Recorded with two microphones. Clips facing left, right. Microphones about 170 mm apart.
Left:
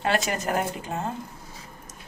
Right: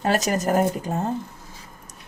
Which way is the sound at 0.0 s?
40° right (ahead or behind).